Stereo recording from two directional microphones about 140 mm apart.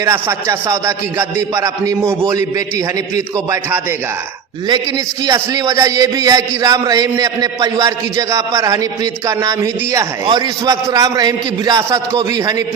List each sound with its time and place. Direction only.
0.0 s speech: 20° right (ahead or behind)
5.2 s speech: 25° right (ahead or behind)